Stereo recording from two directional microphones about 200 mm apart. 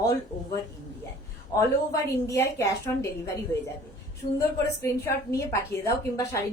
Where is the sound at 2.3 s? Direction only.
15° left (ahead or behind).